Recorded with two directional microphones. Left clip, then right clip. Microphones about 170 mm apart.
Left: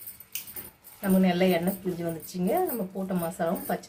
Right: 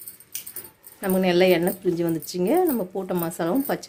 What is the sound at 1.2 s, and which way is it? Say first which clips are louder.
Speech: right 7 dB; 75° right (ahead or behind).